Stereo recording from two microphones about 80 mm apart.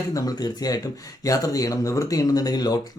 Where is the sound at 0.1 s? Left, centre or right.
Left.